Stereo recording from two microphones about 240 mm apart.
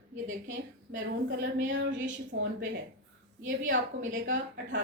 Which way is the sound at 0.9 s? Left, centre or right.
Right.